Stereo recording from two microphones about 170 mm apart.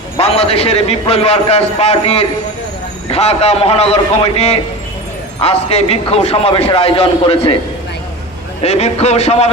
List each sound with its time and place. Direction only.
0.2 s a man's voice: 35° left (ahead or behind)
8.6 s a man's voice: 40° left (ahead or behind)